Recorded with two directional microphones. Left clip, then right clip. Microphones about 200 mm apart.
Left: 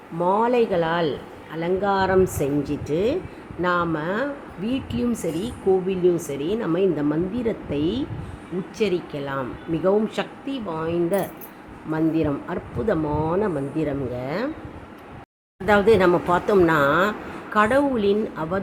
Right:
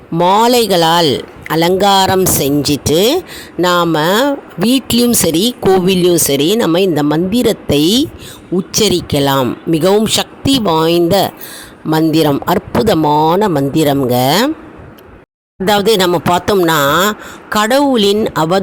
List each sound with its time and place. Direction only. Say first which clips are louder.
0.2 s a woman's voice: right 10 dB; 55° right (ahead or behind)
15.6 s a woman's voice: right 6 dB; 55° right (ahead or behind)